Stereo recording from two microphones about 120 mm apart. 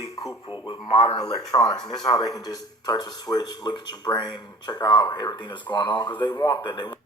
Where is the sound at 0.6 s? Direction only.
40° left (ahead or behind).